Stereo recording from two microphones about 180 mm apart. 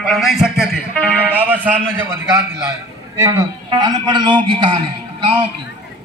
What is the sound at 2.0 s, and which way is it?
A man's voice, 10° right (ahead or behind).